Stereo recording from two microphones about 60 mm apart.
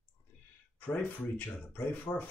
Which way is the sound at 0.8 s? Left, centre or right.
Left.